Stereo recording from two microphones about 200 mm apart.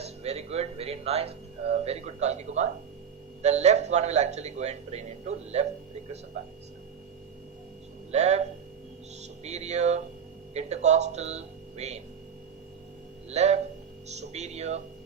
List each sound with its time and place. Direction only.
0.0 s speech: 30° right (ahead or behind)
8.1 s speech: 35° right (ahead or behind)
13.3 s speech: 35° right (ahead or behind)